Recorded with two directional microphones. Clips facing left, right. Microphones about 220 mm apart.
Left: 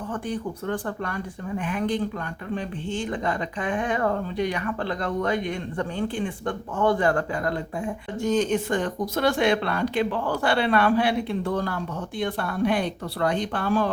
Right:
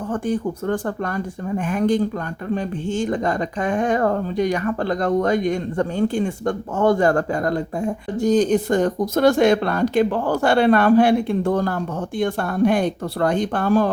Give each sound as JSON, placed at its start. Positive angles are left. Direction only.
{"t": 0.1, "sound": "speech", "side_deg": -45}